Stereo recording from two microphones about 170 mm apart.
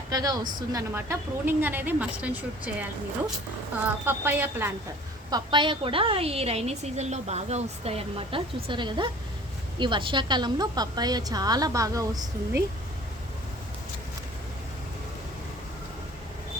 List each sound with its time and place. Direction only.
0.1 s a woman's voice: 20° right (ahead or behind)
4.0 s a woman's voice: 10° right (ahead or behind)
5.3 s a woman's voice: 25° right (ahead or behind)